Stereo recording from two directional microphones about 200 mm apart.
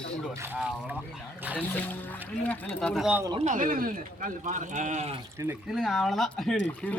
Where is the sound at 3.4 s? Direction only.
40° right (ahead or behind).